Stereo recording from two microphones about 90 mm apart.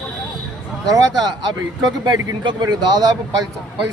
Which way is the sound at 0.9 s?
45° right (ahead or behind).